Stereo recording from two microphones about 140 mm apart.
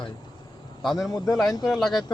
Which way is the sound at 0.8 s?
Centre (ahead or behind).